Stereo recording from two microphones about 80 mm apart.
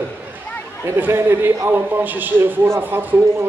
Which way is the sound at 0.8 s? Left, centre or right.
Right.